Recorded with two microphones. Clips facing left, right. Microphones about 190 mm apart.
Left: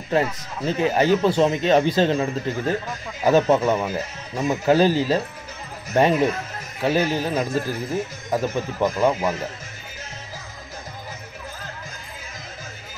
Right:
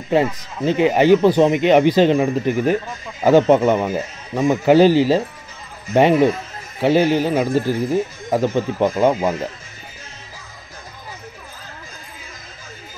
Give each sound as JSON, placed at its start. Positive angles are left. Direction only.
{"t": 0.1, "sound": "speech", "side_deg": -15}